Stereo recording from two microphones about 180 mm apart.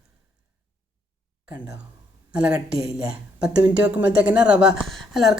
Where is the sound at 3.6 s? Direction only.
5° right (ahead or behind).